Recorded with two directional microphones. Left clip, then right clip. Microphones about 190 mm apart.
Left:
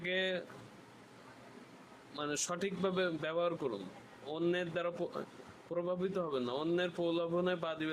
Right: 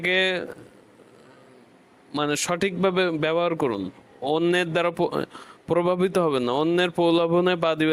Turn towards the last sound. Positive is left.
turn(degrees=-55)  # may be behind; listen again after turning